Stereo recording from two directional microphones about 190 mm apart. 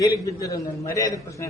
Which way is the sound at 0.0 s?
15° left (ahead or behind).